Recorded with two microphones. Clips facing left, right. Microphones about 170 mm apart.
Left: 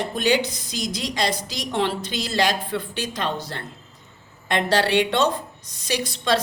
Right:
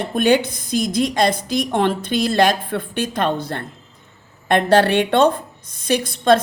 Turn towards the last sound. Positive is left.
turn(degrees=-50)  # may be behind; listen again after turning